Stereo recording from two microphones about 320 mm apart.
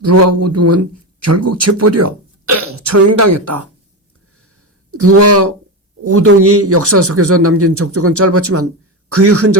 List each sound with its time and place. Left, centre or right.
0.0 s a man's voice: right
4.9 s a man's voice: right